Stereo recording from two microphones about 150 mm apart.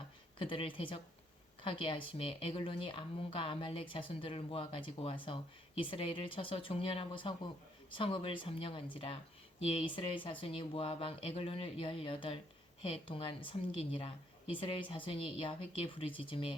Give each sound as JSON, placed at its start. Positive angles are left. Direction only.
{"t": 0.3, "sound": "speech", "side_deg": 35}